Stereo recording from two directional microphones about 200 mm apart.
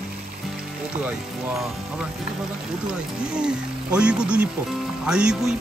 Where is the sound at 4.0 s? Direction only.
5° right (ahead or behind).